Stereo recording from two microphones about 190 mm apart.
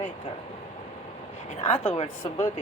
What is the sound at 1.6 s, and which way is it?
Speech, 30° left (ahead or behind).